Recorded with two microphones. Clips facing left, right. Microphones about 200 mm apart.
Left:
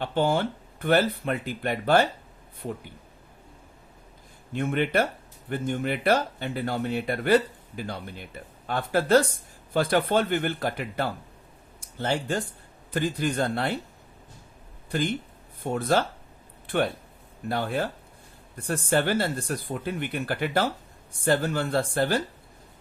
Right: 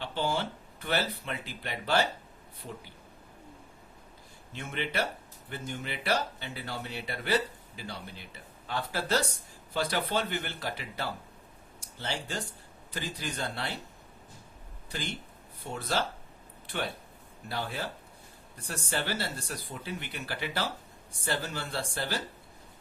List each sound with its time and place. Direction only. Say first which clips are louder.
0.0 s speech: left 7 dB; 55° left (ahead or behind)
4.5 s speech: left 9 dB; 55° left (ahead or behind)
14.8 s speech: left 11 dB; 55° left (ahead or behind)